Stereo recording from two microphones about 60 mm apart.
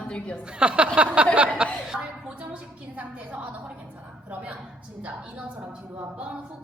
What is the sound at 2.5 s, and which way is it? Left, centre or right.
A woman's voice, right.